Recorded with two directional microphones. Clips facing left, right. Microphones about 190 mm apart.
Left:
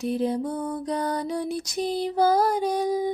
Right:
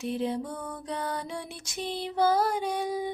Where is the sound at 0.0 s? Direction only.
40° left (ahead or behind).